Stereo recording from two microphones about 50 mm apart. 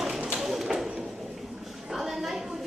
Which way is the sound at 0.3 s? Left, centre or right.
Centre.